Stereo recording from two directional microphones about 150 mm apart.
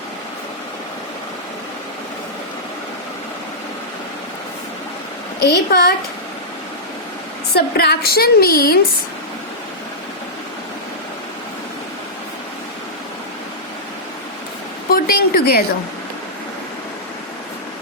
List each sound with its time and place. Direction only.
5.5 s a woman's voice: 90° left
7.5 s a woman's voice: 90° left
14.9 s speech: 85° left